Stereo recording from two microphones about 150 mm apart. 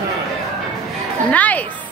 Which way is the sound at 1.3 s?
10° left (ahead or behind).